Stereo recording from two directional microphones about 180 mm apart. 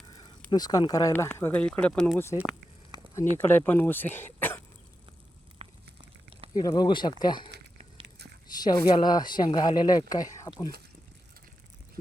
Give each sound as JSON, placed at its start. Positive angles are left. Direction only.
{"t": 0.1, "sound": "speech", "side_deg": 20}
{"t": 2.1, "sound": "speech", "side_deg": 15}
{"t": 3.4, "sound": "speech", "side_deg": 10}
{"t": 5.5, "sound": "a sound", "side_deg": -30}
{"t": 6.6, "sound": "speech", "side_deg": 20}
{"t": 8.5, "sound": "speech", "side_deg": 20}